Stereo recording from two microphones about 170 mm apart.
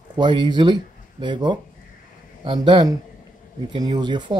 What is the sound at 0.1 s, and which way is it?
Speech, 25° right (ahead or behind).